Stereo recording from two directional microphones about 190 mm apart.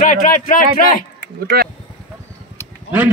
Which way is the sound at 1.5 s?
55° right (ahead or behind).